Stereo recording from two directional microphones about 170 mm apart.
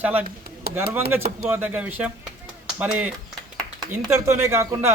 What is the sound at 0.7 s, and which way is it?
Speech, 65° right (ahead or behind).